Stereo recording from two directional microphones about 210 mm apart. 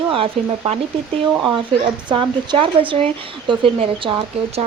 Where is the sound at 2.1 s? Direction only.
25° right (ahead or behind).